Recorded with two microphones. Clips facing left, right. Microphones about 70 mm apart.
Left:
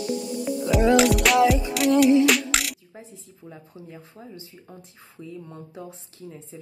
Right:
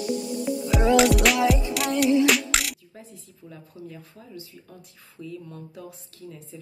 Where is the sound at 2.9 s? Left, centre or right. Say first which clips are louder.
Left 2 dB; left.